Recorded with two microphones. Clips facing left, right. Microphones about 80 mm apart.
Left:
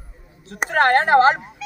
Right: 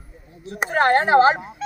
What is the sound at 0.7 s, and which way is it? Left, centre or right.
Speech, left.